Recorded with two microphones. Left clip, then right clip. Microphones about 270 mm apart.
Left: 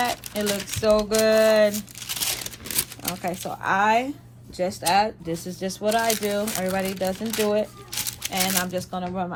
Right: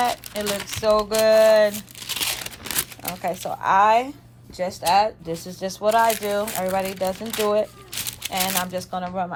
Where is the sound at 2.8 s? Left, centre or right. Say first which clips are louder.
Even; centre.